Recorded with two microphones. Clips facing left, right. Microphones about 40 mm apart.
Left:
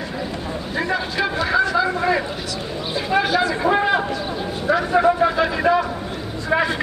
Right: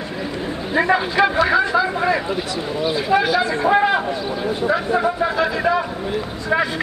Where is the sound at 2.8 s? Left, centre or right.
Centre.